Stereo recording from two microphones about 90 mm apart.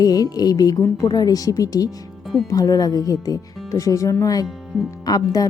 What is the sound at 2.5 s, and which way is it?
Speech, 40° left (ahead or behind).